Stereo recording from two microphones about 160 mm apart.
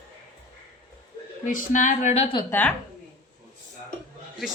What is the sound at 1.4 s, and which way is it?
Speech, 55° left (ahead or behind).